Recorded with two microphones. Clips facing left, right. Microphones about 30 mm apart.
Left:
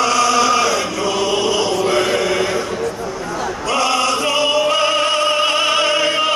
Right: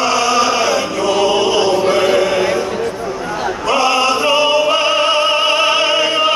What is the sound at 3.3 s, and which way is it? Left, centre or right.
Opera, right.